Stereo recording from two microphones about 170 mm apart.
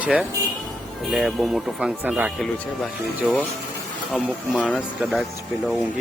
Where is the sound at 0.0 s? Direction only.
5° right (ahead or behind).